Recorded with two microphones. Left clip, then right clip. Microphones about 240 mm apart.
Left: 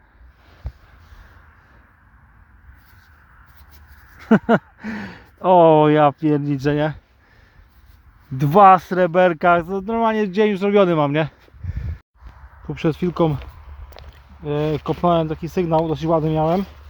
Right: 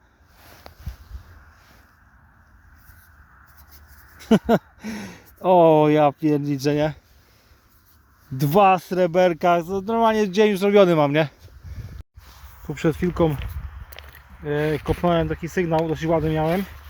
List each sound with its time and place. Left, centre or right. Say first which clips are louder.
0.7 s a sound: right 1 dB; right
4.3 s speech: left 2 dB; centre
8.4 s speech: left 5 dB; centre
12.6 s speech: left 1 dB; centre
14.0 s a sound: right 1 dB; left
14.4 s speech: left 1 dB; centre